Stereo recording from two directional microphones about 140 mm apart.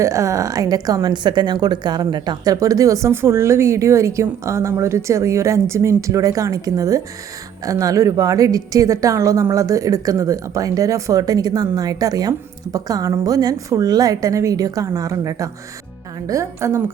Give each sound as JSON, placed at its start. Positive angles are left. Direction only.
{"t": 0.0, "sound": "a woman's voice", "side_deg": -20}